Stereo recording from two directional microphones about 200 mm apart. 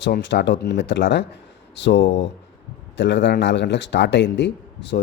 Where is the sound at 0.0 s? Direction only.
60° left (ahead or behind).